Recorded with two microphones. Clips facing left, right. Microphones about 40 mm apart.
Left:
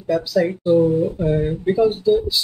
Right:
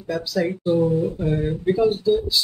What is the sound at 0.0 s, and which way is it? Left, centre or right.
Speech, centre.